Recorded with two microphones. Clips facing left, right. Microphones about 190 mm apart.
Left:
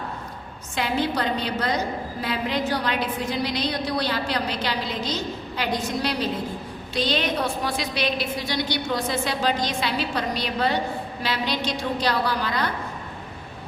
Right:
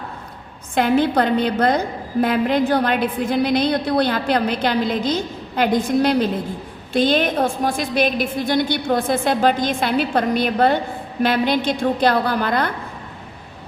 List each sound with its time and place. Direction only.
0.8 s a woman's voice: 55° right (ahead or behind)